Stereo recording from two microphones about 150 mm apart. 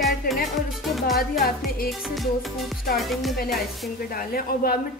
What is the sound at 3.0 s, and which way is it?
Music, centre (ahead or behind).